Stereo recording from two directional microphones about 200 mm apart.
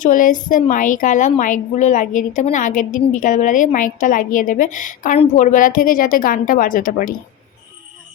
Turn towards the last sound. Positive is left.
turn(degrees=45)  # may be behind; listen again after turning